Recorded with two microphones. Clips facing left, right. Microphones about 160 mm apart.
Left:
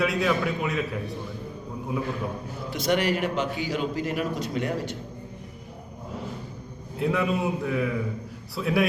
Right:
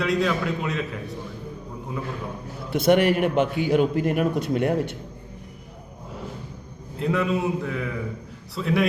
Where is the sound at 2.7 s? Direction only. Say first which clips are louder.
Right 6 dB; 55° right (ahead or behind).